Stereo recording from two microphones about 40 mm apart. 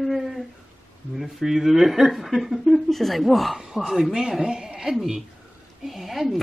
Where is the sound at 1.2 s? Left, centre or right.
Centre.